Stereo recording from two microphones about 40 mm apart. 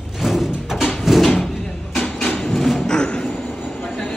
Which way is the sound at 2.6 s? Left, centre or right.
Centre.